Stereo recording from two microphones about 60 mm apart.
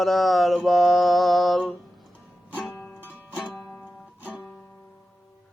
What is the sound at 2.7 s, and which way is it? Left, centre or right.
Music, left.